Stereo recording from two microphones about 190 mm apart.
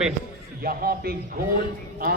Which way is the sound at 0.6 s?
50° right (ahead or behind).